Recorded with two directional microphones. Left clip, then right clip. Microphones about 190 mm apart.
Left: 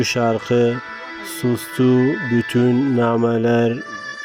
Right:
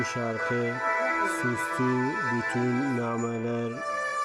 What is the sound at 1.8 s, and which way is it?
Speech, 50° left (ahead or behind).